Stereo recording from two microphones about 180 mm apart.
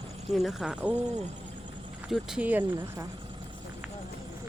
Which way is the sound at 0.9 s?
40° right (ahead or behind).